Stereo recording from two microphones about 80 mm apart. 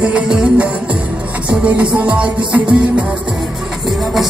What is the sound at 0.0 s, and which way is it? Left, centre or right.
Music, centre.